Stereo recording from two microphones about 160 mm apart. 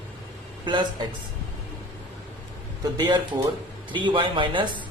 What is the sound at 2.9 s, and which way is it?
A man's voice, 30° right (ahead or behind).